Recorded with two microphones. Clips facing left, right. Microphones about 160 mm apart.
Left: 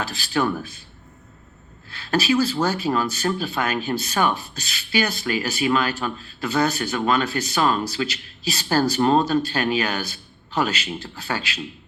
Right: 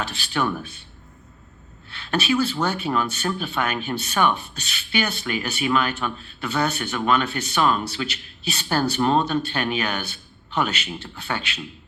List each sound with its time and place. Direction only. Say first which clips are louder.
0.3 s speech: left 2 dB; 35° left (ahead or behind)
2.0 s speech: left 2 dB; 35° left (ahead or behind)